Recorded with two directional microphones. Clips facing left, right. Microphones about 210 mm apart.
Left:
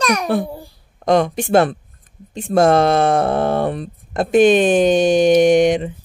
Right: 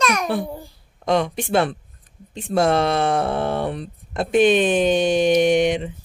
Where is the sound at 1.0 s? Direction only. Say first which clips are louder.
Left 5 dB; 45° left (ahead or behind).